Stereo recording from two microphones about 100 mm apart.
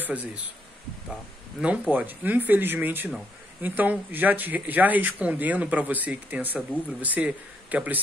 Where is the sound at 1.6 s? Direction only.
15° right (ahead or behind).